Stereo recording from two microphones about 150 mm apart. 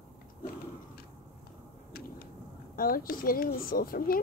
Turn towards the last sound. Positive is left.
turn(degrees=75)  # may be behind; listen again after turning